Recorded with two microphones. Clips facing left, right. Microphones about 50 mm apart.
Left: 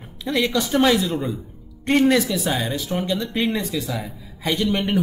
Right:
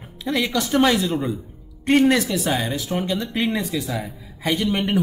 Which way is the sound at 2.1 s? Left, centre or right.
Centre.